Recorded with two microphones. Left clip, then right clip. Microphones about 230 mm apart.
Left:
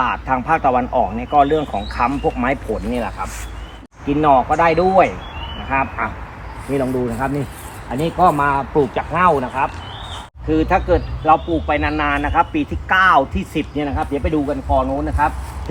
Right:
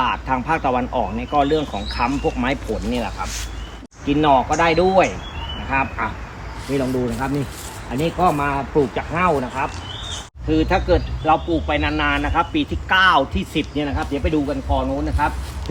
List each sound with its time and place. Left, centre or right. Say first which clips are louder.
0.0 s speech: left 2 dB; centre
7.9 s speech: left 4 dB; left
10.5 s speech: left 2 dB; centre